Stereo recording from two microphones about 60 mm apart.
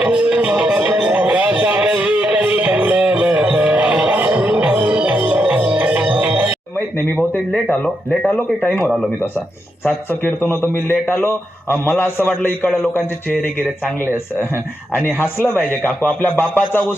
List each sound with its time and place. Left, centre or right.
0.0 s music: centre
8.3 s speech: left
9.8 s a man's voice: left